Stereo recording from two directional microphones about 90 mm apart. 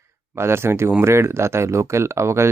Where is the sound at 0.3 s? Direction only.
30° right (ahead or behind).